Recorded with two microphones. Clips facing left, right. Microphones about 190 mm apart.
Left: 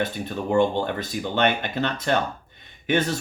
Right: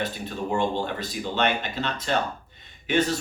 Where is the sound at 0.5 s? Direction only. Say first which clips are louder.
Left 5 dB; 55° left (ahead or behind).